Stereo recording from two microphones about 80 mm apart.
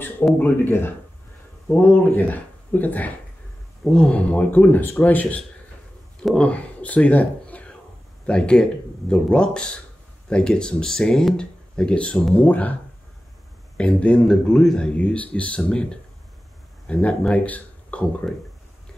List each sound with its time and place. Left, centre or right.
0.4 s speech: left
13.7 s speech: centre
15.0 s speech: centre